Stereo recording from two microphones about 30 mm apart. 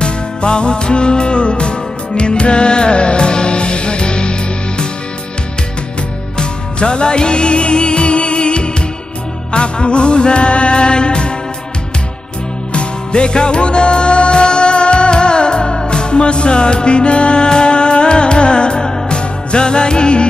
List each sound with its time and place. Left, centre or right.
0.0 s music: left
6.3 s music: left
12.7 s music: left